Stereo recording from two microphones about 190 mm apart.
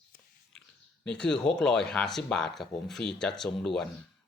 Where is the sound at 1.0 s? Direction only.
5° left (ahead or behind).